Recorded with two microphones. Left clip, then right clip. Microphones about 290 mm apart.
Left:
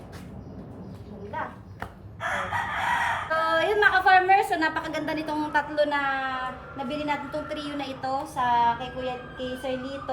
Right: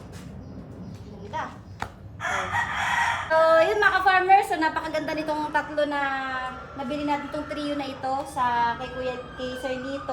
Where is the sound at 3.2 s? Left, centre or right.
Centre.